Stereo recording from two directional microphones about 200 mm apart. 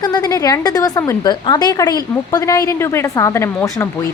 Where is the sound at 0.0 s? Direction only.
20° left (ahead or behind).